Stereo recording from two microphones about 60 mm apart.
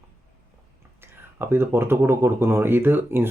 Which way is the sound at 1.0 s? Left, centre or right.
Right.